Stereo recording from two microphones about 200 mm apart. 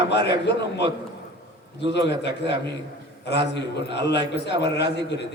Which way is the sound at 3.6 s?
60° left (ahead or behind).